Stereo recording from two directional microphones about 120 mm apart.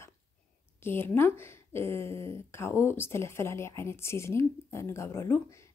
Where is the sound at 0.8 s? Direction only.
20° left (ahead or behind).